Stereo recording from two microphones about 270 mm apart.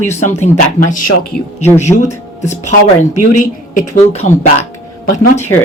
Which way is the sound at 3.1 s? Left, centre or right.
Left.